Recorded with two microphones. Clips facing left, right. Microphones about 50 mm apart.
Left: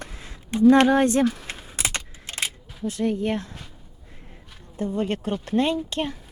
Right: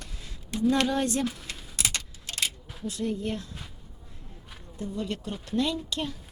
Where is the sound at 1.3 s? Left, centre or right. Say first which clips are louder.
Left 4 dB; left.